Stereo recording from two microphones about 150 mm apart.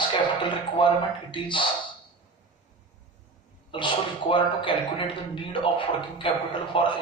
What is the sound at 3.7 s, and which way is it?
Speech, 35° left (ahead or behind).